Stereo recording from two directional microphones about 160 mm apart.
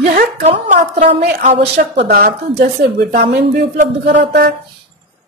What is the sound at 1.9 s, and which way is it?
Speech, 80° right.